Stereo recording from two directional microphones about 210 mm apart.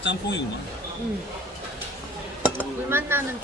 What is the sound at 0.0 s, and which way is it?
Speech, 55° left (ahead or behind).